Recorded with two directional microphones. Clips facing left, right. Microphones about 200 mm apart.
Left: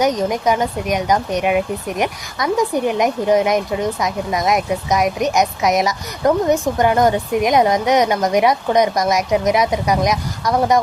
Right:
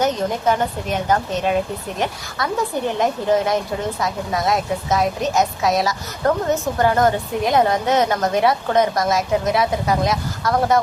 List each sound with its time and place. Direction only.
0.0 s a woman's voice: 15° left (ahead or behind)